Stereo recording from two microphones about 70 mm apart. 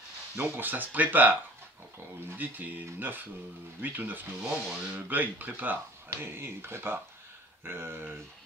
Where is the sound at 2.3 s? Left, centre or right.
Right.